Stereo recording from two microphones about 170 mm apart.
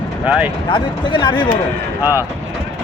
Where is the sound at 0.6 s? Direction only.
30° left (ahead or behind).